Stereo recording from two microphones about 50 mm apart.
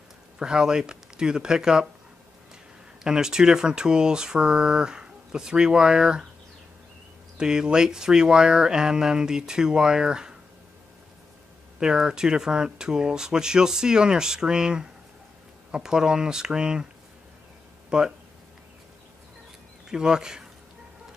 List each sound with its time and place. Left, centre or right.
0.4 s speech: centre
3.0 s speech: centre
7.3 s speech: centre
11.8 s speech: centre
17.8 s speech: centre
19.9 s speech: centre